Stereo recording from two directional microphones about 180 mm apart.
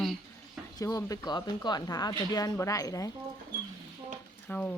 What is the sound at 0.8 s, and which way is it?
Speech, 20° left (ahead or behind).